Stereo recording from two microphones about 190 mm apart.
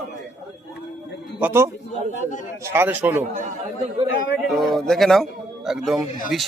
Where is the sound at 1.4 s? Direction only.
10° right (ahead or behind).